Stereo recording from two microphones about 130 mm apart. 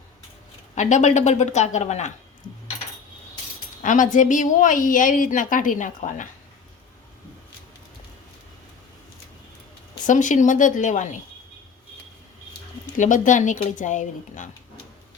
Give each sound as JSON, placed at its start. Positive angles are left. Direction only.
{"t": 0.8, "sound": "a woman's voice", "side_deg": 65}
{"t": 3.8, "sound": "a woman's voice", "side_deg": 80}
{"t": 10.1, "sound": "a woman's voice", "side_deg": 75}
{"t": 13.0, "sound": "a woman's voice", "side_deg": 80}